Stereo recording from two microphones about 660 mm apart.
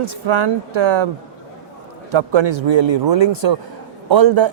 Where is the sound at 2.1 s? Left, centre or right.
Right.